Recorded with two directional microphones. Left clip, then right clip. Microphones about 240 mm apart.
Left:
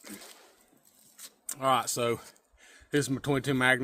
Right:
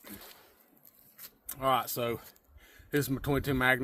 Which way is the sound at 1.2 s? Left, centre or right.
Centre.